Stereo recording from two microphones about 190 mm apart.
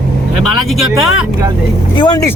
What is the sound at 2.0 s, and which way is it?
Speech, 20° left (ahead or behind).